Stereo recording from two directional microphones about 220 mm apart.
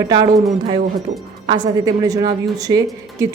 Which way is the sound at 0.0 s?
20° right (ahead or behind).